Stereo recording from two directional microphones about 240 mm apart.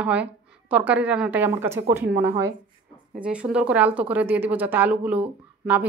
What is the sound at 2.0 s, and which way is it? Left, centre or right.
Speech, right.